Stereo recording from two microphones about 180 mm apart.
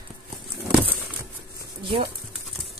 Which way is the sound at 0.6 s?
10° right (ahead or behind).